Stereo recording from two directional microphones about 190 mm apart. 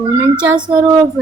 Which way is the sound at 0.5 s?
25° right (ahead or behind).